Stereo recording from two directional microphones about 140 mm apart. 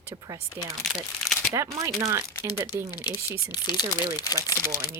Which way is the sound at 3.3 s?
30° left (ahead or behind).